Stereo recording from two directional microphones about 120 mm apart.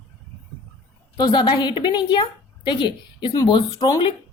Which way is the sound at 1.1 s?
35° left (ahead or behind).